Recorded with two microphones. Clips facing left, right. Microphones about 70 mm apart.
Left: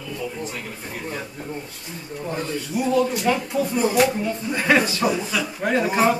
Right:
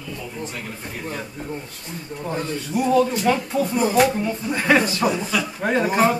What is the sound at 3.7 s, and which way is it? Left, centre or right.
Speech, right.